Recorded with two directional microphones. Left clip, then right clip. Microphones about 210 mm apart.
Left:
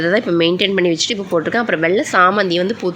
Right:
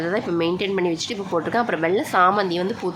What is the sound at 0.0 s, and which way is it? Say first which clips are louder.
Speech: left 8 dB; 15° left (ahead or behind).